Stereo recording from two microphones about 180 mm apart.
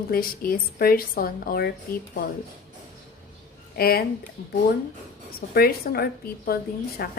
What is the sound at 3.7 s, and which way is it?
Speech, 60° left (ahead or behind).